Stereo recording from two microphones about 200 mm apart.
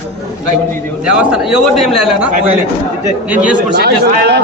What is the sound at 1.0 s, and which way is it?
A man's voice, 5° right (ahead or behind).